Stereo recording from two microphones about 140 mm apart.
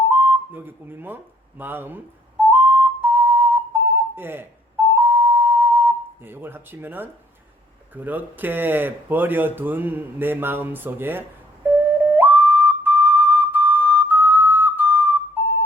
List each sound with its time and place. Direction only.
0.1 s whistling: 15° right (ahead or behind)
2.4 s whistle: 15° right (ahead or behind)
4.9 s flute: 15° right (ahead or behind)
7.9 s speech: 10° right (ahead or behind)
11.6 s theremin: 15° right (ahead or behind)
12.1 s whistle: 15° right (ahead or behind)